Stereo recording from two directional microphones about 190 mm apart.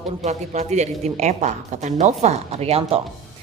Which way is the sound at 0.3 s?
35° right (ahead or behind).